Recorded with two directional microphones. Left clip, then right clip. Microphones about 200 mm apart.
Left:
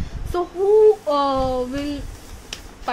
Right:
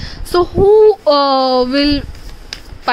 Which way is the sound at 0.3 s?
50° right (ahead or behind).